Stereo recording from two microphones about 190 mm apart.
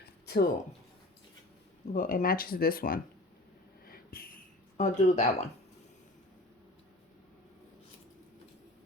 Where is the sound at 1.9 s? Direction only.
45° left (ahead or behind).